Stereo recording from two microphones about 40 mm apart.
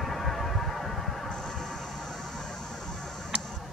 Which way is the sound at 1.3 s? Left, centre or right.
Centre.